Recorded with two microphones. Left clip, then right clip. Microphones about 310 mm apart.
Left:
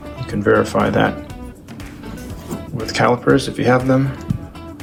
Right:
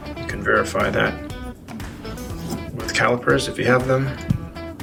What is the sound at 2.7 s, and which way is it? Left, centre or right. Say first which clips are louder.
Speech: left 3 dB; centre.